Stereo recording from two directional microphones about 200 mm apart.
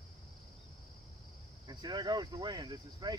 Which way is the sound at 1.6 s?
20° right (ahead or behind).